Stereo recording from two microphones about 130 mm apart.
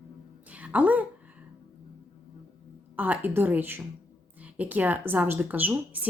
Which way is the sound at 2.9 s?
10° right (ahead or behind).